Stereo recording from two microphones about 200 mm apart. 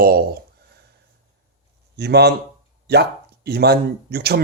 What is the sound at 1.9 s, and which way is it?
A man's voice, 55° right (ahead or behind).